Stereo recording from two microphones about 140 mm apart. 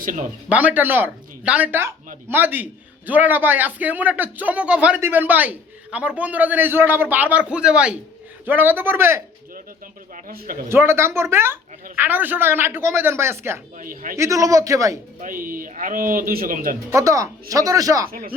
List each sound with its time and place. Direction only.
0.0 s speech: 70° right (ahead or behind)
0.4 s a man's voice: 10° right (ahead or behind)
10.2 s a man's voice: 90° right
10.7 s a man's voice: 15° right (ahead or behind)
13.7 s speech: 75° right (ahead or behind)
14.2 s a man's voice: 25° right (ahead or behind)
15.2 s speech: 80° right
16.9 s a man's voice: 25° right (ahead or behind)
18.1 s a man's voice: 90° right